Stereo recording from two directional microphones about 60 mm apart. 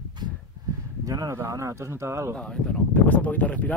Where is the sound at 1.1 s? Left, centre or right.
Right.